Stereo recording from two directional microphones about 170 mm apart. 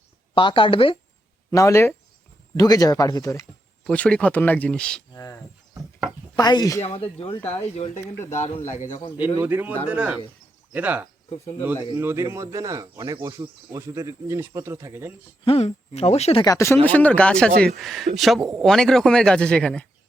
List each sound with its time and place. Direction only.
0.3 s speech: 30° left (ahead or behind)
1.5 s speech: 15° left (ahead or behind)
3.8 s speech: 5° left (ahead or behind)
5.1 s bird: 15° left (ahead or behind)
6.3 s speech: 25° left (ahead or behind)
6.8 s speech: 35° left (ahead or behind)
9.0 s speech: 25° left (ahead or behind)
9.2 s speech: 10° right (ahead or behind)
11.7 s speech: 30° left (ahead or behind)
11.9 s speech: 15° right (ahead or behind)
15.4 s speech: 35° left (ahead or behind)
16.4 s speech: 20° left (ahead or behind)